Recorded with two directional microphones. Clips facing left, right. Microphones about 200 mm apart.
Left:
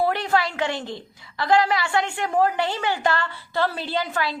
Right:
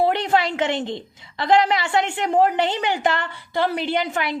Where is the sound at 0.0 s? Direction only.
20° right (ahead or behind).